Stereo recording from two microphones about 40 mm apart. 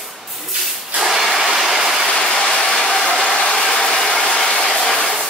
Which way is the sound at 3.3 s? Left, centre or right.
Centre.